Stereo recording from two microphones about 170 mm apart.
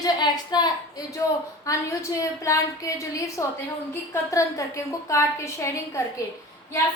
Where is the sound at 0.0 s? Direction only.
25° left (ahead or behind).